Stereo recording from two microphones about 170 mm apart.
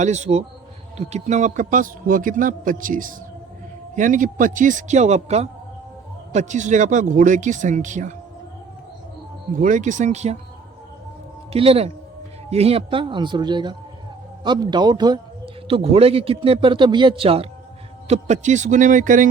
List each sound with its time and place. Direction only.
0.0 s a man's voice: 40° right (ahead or behind)
9.6 s a man's voice: 50° right (ahead or behind)
11.5 s a man's voice: 35° right (ahead or behind); by 19.3 s 50° right (ahead or behind)